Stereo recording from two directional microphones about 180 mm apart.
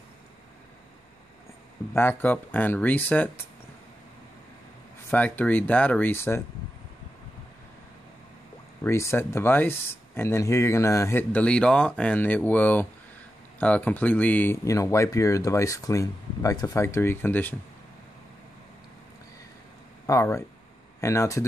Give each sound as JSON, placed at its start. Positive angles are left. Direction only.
{"t": 2.0, "sound": "speech", "side_deg": 10}
{"t": 5.1, "sound": "speech", "side_deg": 10}
{"t": 8.8, "sound": "speech", "side_deg": 15}
{"t": 20.1, "sound": "speech", "side_deg": 15}